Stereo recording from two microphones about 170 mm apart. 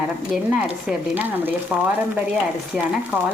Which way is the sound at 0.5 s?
10° right (ahead or behind).